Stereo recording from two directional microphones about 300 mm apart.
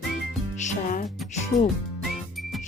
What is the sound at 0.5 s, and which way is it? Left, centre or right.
Music, left.